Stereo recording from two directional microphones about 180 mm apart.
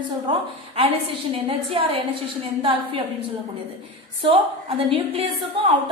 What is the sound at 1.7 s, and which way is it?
Speech, 30° right (ahead or behind).